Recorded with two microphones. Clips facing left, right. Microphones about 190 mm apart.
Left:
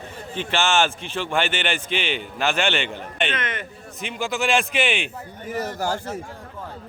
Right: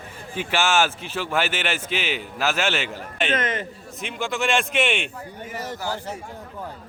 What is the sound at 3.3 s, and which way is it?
Speech, 40° right (ahead or behind).